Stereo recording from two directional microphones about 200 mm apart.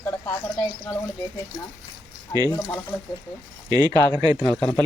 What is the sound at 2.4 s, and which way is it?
Speech, 15° left (ahead or behind).